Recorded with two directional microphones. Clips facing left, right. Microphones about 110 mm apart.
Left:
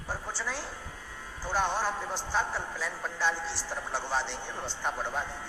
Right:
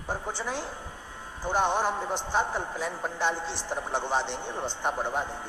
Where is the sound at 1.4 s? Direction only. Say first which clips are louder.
Right 4 dB; 20° right (ahead or behind).